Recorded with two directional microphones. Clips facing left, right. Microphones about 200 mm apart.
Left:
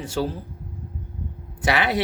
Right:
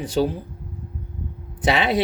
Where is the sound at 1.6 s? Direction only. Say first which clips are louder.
Right 2 dB; 20° right (ahead or behind).